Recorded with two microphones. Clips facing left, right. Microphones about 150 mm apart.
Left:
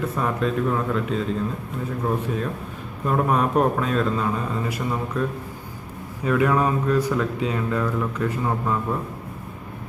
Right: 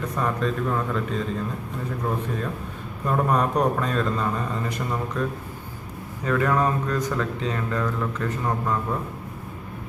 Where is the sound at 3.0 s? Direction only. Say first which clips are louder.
Left 1 dB; 5° left (ahead or behind).